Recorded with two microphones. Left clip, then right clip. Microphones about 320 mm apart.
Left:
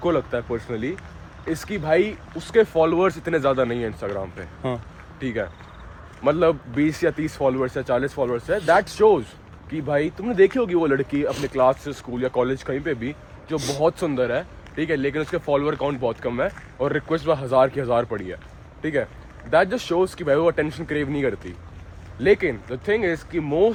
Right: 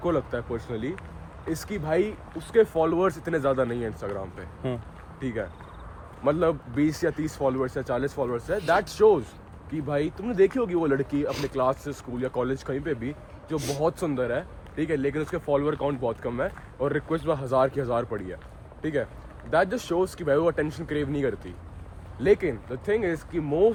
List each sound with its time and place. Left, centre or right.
0.0 s speech: left
4.7 s speech: centre
5.2 s speech: left